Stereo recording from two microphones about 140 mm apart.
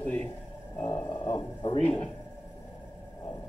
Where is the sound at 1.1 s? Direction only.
35° left (ahead or behind).